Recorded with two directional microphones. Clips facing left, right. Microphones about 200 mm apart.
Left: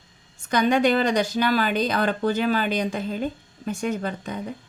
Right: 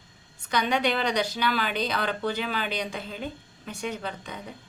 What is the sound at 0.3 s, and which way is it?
A woman's voice, 45° left (ahead or behind).